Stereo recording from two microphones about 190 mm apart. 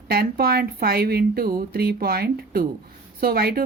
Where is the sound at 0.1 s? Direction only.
55° right (ahead or behind).